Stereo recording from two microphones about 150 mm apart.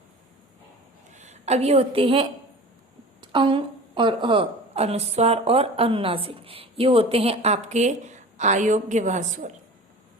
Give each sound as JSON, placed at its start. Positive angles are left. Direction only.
{"t": 1.1, "sound": "a woman's voice", "side_deg": -50}